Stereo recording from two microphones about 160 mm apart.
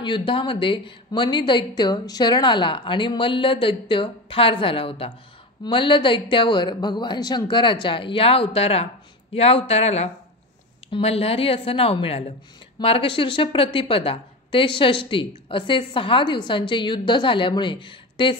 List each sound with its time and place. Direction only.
0.0 s a woman's voice: 30° left (ahead or behind)